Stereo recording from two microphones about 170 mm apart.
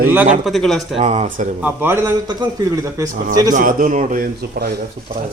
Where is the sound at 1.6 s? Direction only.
10° right (ahead or behind).